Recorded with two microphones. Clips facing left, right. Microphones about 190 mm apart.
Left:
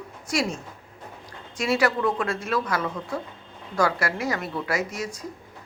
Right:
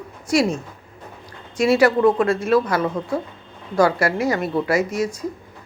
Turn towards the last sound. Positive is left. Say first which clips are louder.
# right 8 dB
turn(degrees=-30)  # may be behind; listen again after turning